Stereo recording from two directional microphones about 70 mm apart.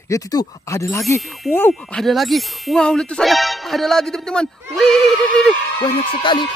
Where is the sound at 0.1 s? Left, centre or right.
Left.